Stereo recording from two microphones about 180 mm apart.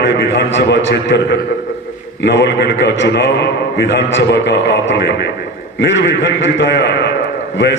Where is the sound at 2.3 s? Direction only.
70° left (ahead or behind).